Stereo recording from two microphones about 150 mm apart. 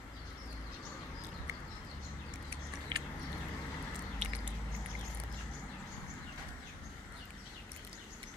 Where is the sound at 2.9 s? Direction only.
30° right (ahead or behind).